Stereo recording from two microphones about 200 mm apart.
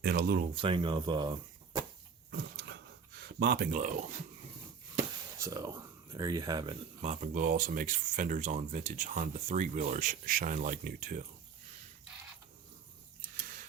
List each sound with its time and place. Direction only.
0.0 s speech: 50° right (ahead or behind)
0.5 s speech: 25° right (ahead or behind)
2.3 s dog: 65° right (ahead or behind)
3.4 s speech: 55° right (ahead or behind)
3.7 s speech: 35° right (ahead or behind)
5.4 s speech: 15° right (ahead or behind)
7.0 s speech: 35° right (ahead or behind)